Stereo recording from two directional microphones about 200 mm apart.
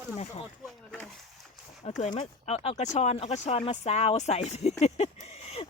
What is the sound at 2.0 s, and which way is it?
Speech, 35° left (ahead or behind).